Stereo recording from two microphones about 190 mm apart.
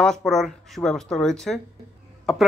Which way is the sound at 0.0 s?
Centre (ahead or behind).